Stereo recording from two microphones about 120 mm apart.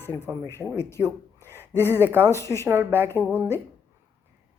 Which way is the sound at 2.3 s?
25° left (ahead or behind).